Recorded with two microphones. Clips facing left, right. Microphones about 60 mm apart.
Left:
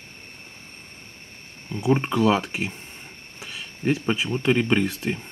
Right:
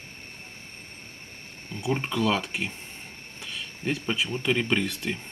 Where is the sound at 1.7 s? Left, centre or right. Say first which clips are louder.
Left 6 dB; left.